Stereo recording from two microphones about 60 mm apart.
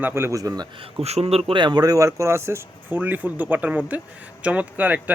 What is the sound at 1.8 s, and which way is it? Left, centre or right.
Speech, right.